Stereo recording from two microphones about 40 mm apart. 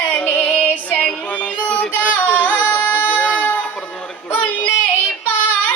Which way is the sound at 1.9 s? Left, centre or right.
Left.